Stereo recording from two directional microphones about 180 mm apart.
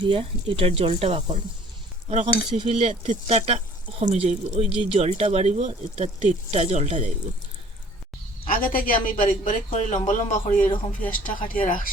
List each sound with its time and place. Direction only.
0.0 s speech: 30° right (ahead or behind)
8.4 s a woman's voice: 50° left (ahead or behind)